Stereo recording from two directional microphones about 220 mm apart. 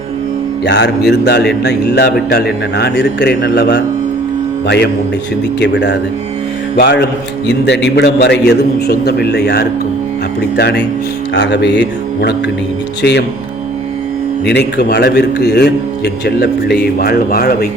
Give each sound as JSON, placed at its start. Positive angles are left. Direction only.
{"t": 0.6, "sound": "a man's voice", "side_deg": 50}
{"t": 14.4, "sound": "a man's voice", "side_deg": 50}